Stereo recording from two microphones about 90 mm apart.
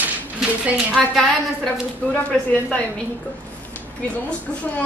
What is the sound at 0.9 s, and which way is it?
Speech, centre (ahead or behind).